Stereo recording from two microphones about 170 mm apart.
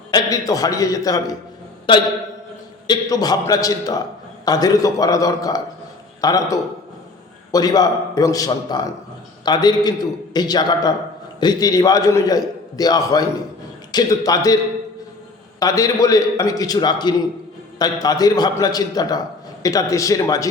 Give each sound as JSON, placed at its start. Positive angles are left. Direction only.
{"t": 0.1, "sound": "a man's voice", "side_deg": 20}